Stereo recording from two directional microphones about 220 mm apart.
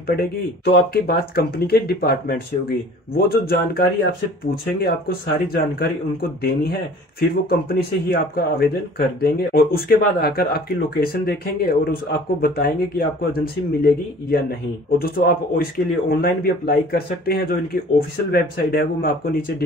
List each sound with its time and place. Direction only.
0.0 s speech: 45° left (ahead or behind)